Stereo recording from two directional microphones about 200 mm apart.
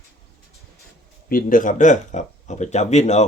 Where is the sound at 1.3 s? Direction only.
45° left (ahead or behind).